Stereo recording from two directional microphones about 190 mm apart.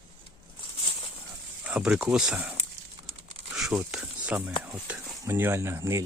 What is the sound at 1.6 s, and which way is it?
Speech, 5° right (ahead or behind).